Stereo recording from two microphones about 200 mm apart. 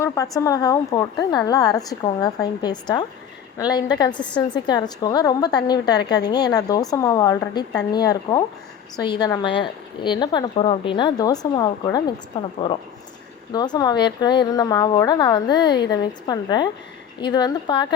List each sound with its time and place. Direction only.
0.0 s a woman's voice: 15° left (ahead or behind)
4.1 s a woman's voice: 5° left (ahead or behind)
4.4 s a woman's voice: 20° left (ahead or behind)
13.5 s speech: 20° left (ahead or behind)